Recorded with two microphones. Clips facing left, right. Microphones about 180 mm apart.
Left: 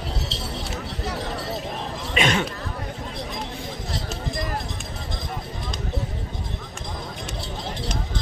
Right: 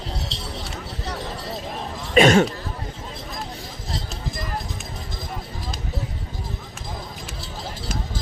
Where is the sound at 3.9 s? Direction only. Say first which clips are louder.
Left 1 dB; centre (ahead or behind).